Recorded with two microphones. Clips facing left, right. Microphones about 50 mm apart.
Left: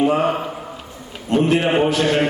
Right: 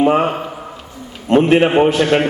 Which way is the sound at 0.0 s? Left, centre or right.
Right.